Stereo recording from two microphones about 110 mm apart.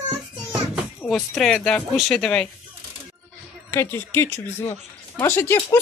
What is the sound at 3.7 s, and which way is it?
Speech, 25° left (ahead or behind).